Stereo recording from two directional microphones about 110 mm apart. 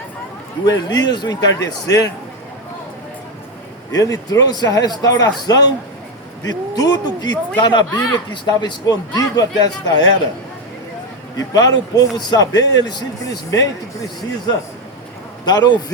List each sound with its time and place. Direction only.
0.6 s a man's voice: 35° left (ahead or behind)
3.9 s a man's voice: 30° left (ahead or behind)
11.3 s a man's voice: 35° left (ahead or behind)
15.4 s a man's voice: 40° left (ahead or behind)